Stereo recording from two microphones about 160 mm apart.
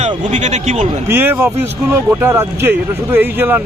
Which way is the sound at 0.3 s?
45° right (ahead or behind).